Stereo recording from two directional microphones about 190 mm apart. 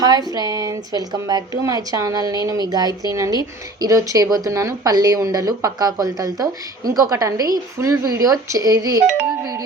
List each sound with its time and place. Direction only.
0.0 s speech: 20° right (ahead or behind)
9.4 s music: 20° right (ahead or behind)